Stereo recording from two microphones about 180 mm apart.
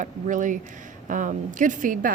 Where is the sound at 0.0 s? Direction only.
45° right (ahead or behind).